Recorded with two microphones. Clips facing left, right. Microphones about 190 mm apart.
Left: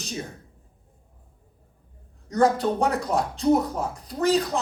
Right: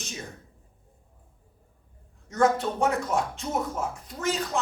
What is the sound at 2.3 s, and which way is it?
Speech, 35° left (ahead or behind).